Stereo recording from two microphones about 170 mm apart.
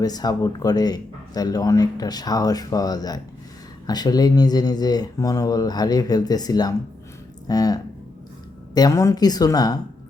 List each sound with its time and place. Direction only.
0.0 s speech: 25° left (ahead or behind)